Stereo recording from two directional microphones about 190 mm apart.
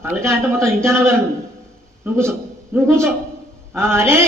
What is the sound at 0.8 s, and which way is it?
A man's voice, 15° right (ahead or behind).